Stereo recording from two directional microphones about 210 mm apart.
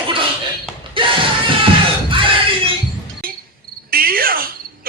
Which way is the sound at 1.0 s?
25° right (ahead or behind).